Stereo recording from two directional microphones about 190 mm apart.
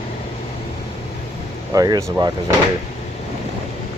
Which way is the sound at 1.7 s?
20° right (ahead or behind).